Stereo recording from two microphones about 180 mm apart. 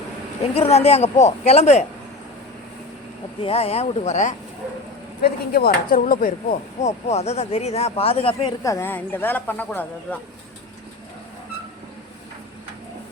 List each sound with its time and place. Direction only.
0.5 s speech: 35° left (ahead or behind)
3.4 s speech: 35° left (ahead or behind)
5.2 s speech: 55° left (ahead or behind)
6.8 s speech: 35° left (ahead or behind)
8.6 s speech: 15° left (ahead or behind)